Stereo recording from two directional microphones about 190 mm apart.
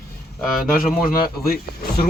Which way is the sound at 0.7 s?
50° left (ahead or behind).